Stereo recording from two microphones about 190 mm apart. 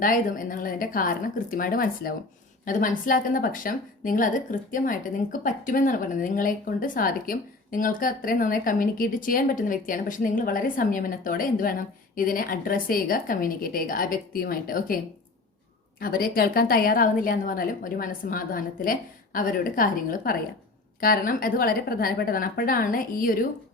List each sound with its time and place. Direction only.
0.0 s speech: 45° left (ahead or behind)